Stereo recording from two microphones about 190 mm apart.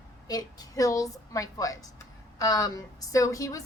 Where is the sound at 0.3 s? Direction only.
20° left (ahead or behind).